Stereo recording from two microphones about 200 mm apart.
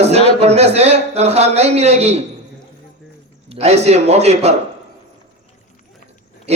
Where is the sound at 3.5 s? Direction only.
35° right (ahead or behind).